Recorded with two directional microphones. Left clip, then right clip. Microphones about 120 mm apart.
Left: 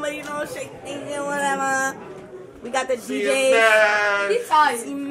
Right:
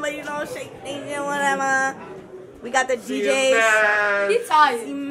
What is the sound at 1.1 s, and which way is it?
Speech, centre (ahead or behind).